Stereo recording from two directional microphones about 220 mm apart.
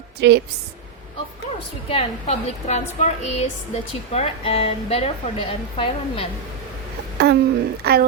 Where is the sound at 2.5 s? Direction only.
30° left (ahead or behind).